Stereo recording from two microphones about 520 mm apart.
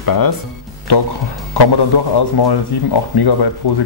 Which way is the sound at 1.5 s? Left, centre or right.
Left.